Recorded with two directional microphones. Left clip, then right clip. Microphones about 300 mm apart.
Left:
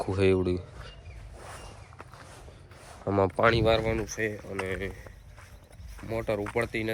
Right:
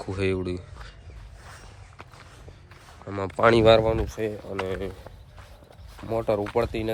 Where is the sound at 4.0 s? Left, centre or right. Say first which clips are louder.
Right 2 dB; centre.